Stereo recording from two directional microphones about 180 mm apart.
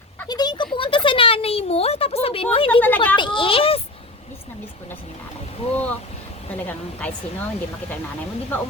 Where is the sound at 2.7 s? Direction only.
10° left (ahead or behind).